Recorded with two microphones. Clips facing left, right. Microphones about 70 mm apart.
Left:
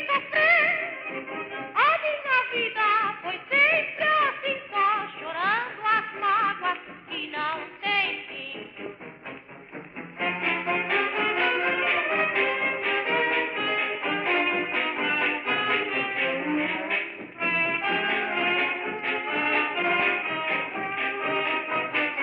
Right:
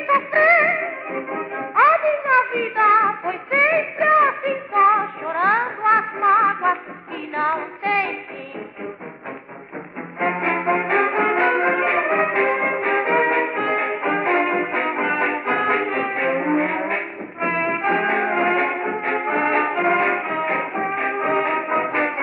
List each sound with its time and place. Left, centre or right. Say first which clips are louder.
0.0 s music: right 7 dB; right
10.2 s music: right 7 dB; right